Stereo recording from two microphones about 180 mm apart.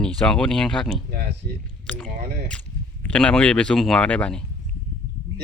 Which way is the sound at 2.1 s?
60° right (ahead or behind).